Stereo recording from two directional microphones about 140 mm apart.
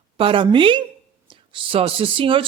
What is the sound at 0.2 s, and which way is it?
A woman's voice, 40° right (ahead or behind).